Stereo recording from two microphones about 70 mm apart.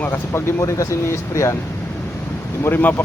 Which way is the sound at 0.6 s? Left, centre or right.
Left.